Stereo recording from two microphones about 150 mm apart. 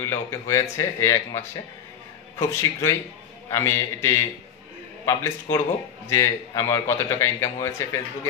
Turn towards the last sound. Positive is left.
turn(degrees=20)  # may be behind; listen again after turning